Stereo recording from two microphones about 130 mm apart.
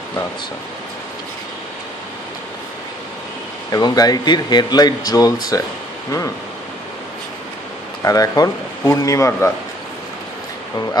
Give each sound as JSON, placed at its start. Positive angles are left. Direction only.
{"t": 3.7, "sound": "speech", "side_deg": 30}
{"t": 8.0, "sound": "speech", "side_deg": 25}